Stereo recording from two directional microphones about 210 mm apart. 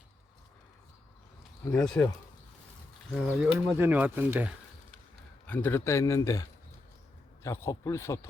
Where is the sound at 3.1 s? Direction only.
Centre (ahead or behind).